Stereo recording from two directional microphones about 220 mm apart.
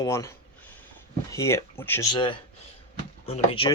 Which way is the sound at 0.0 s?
15° left (ahead or behind).